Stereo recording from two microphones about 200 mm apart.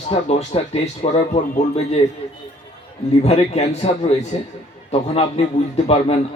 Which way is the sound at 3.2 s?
30° left (ahead or behind).